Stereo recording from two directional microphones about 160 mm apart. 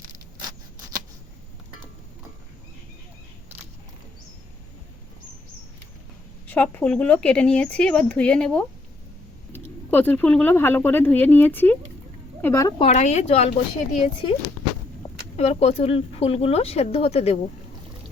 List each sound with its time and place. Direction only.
6.5 s speech: 10° left (ahead or behind)
12.8 s speech: 45° left (ahead or behind)
15.4 s speech: 40° left (ahead or behind)